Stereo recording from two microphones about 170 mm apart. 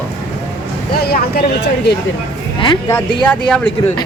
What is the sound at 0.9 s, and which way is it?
Speech, 65° left (ahead or behind).